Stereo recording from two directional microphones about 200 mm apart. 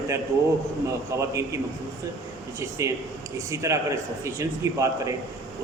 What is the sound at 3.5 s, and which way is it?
A man's voice, 15° right (ahead or behind).